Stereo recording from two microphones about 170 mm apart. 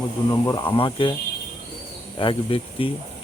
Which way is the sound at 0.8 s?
30° left (ahead or behind).